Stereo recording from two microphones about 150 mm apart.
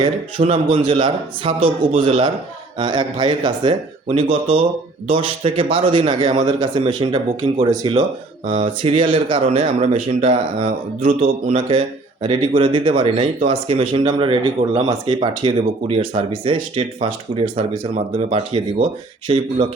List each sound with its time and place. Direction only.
0.0 s speech: 35° right (ahead or behind)